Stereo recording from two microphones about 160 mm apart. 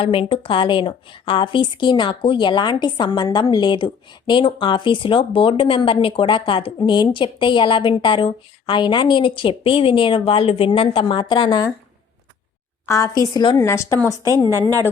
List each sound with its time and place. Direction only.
0.0 s a woman's voice: 35° left (ahead or behind)
12.8 s a woman's voice: 20° left (ahead or behind)